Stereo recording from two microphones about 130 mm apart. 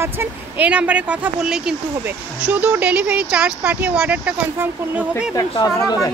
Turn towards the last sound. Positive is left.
turn(degrees=30)  # may be behind; listen again after turning